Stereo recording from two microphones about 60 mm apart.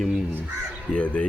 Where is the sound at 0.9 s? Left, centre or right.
Centre.